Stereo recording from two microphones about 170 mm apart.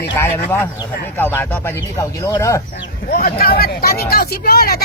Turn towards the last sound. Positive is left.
turn(degrees=60)  # may be behind; listen again after turning